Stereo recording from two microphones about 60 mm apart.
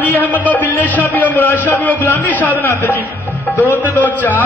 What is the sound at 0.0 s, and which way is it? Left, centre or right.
Speech, left.